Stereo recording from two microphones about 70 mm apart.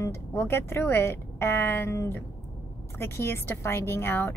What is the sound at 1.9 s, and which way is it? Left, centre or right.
Speech, left.